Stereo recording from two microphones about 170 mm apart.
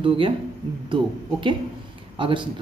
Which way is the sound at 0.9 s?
30° right (ahead or behind).